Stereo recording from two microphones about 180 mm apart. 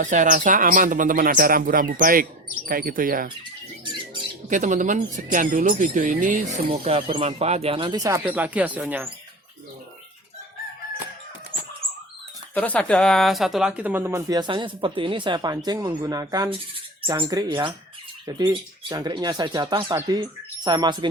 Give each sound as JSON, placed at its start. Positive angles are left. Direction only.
{"t": 0.0, "sound": "speech", "side_deg": -45}
{"t": 4.4, "sound": "speech", "side_deg": -45}
{"t": 6.7, "sound": "speech", "side_deg": -30}
{"t": 12.5, "sound": "speech", "side_deg": 10}